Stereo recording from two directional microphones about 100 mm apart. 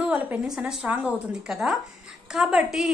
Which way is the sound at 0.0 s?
15° right (ahead or behind).